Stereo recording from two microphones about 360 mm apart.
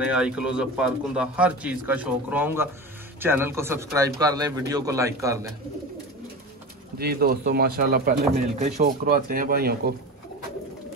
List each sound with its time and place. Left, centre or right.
0.0 s a man's voice: centre
7.0 s speech: right